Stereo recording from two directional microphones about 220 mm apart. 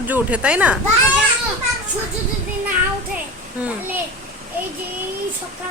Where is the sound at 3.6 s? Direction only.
5° right (ahead or behind).